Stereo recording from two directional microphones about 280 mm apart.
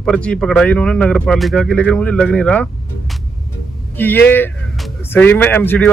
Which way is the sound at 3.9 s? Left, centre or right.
Centre.